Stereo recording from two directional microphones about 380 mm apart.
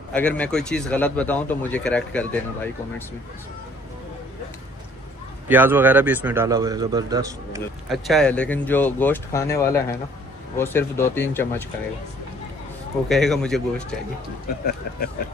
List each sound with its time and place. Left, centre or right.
0.1 s a man's voice: centre
5.5 s a man's voice: centre
13.1 s a man's voice: centre
14.6 s speech: left